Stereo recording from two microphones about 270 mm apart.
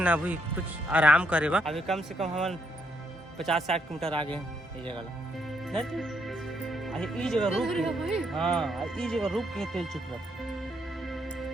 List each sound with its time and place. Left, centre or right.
0.0 s speech: centre
4.1 s speech: centre
5.7 s speech: centre